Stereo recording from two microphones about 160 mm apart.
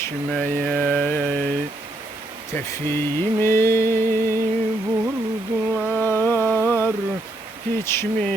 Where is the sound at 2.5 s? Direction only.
15° left (ahead or behind).